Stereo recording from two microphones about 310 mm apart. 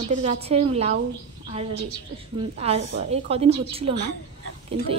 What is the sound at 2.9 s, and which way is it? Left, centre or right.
A woman's voice, centre.